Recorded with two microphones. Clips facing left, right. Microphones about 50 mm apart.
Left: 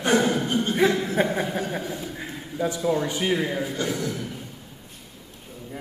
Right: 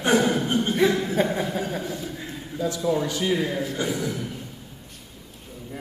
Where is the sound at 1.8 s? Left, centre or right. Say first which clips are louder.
Even; centre.